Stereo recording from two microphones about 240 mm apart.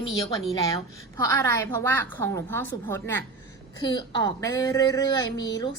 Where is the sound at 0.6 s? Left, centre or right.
Centre.